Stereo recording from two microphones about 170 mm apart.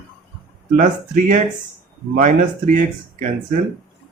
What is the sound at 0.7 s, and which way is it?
Speech, 50° right (ahead or behind).